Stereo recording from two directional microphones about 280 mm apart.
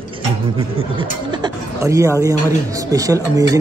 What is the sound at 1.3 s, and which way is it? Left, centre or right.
Speech, centre.